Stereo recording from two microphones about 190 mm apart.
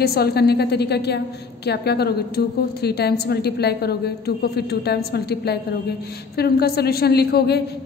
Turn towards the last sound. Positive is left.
turn(degrees=60)  # may be behind; listen again after turning